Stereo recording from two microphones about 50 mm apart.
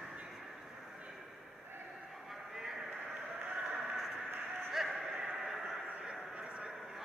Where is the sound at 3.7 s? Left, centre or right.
Centre.